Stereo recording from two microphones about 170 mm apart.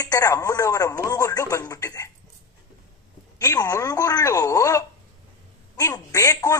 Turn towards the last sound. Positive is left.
turn(degrees=20)  # may be behind; listen again after turning